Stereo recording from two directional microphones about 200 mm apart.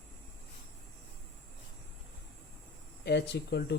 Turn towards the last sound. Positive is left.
turn(degrees=55)  # may be behind; listen again after turning